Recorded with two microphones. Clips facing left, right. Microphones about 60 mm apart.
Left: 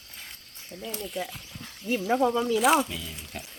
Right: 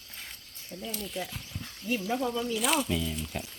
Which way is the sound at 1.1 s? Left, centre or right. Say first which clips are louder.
Left 3 dB; centre.